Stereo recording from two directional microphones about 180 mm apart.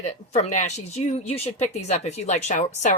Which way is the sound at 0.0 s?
40° left (ahead or behind).